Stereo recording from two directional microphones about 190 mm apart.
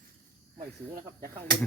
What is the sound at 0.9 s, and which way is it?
Speech, 50° right (ahead or behind).